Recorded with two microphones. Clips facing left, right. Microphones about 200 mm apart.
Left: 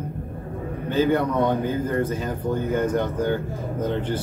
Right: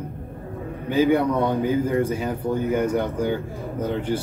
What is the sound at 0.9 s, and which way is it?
Speech, 15° right (ahead or behind).